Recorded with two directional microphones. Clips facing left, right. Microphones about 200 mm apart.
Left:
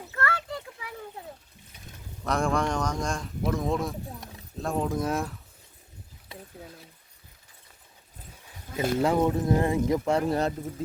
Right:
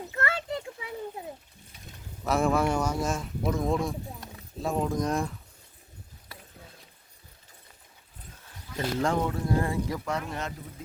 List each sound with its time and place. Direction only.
0.1 s a sound: 20° right (ahead or behind)
2.2 s speech: 5° right (ahead or behind)
8.7 s speech: 10° left (ahead or behind)
9.2 s speech: 20° left (ahead or behind)
10.2 s speech: 35° left (ahead or behind)